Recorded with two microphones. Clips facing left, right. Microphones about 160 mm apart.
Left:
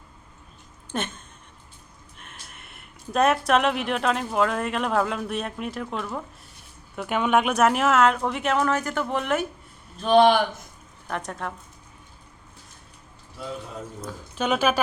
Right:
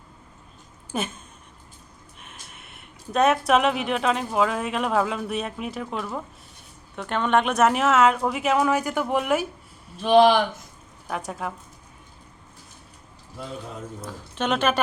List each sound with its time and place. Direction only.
0.9 s a sound: 5° right (ahead or behind)
2.1 s speech: centre (ahead or behind)
14.0 s speech: centre (ahead or behind)